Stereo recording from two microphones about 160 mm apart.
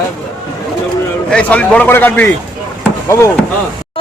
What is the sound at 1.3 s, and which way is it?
A man's voice, 5° left (ahead or behind).